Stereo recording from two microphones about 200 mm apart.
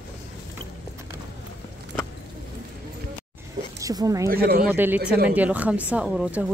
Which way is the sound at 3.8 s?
15° right (ahead or behind).